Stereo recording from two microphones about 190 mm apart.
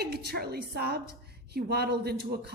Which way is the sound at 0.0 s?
60° right (ahead or behind).